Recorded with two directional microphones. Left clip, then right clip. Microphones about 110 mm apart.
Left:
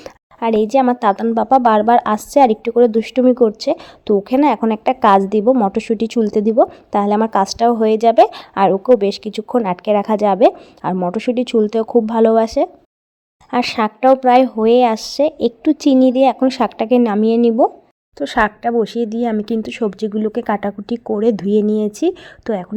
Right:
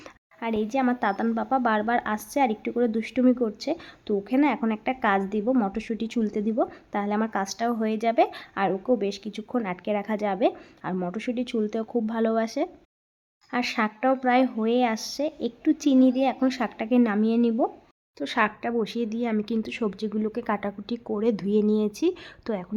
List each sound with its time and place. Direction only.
0.0 s a woman's voice: 55° left (ahead or behind)
13.5 s a woman's voice: 60° left (ahead or behind)
14.1 s a woman's voice: 45° left (ahead or behind)